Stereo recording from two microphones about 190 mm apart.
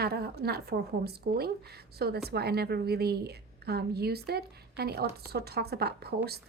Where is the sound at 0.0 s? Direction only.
55° right (ahead or behind).